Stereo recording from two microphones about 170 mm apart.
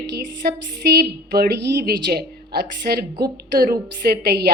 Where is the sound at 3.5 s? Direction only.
60° right (ahead or behind).